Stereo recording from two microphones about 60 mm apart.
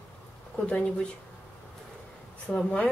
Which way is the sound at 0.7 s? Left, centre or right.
Left.